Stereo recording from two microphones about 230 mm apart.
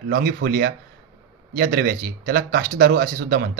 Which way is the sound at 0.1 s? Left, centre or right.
Right.